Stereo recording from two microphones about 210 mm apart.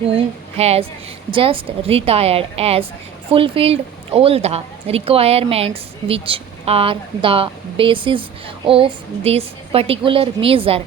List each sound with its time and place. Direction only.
0.1 s speech: 30° right (ahead or behind)